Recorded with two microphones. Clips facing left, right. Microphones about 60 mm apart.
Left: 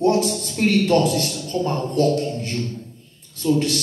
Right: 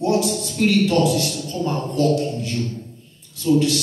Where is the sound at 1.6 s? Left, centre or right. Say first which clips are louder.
Even; left.